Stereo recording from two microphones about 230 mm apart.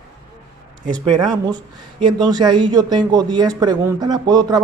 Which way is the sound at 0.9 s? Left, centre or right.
Centre.